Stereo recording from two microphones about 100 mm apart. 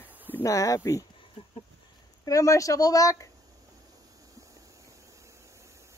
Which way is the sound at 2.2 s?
35° left (ahead or behind).